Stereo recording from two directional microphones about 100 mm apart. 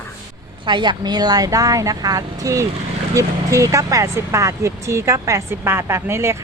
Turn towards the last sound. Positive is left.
turn(degrees=-25)  # may be behind; listen again after turning